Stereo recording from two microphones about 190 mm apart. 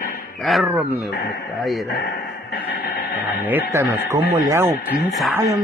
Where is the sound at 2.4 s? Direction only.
55° left (ahead or behind).